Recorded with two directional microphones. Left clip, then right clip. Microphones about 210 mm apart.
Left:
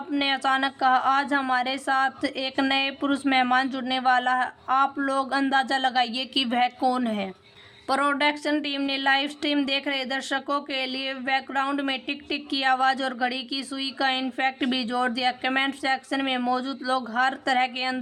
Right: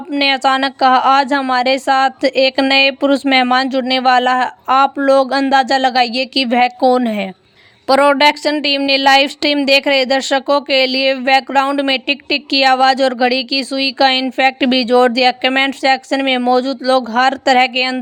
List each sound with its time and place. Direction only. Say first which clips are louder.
0.2 s a woman's voice: right 11 dB; 35° right (ahead or behind)